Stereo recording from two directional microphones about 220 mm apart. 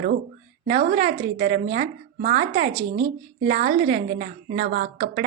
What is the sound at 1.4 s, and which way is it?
A woman's voice, 35° right (ahead or behind).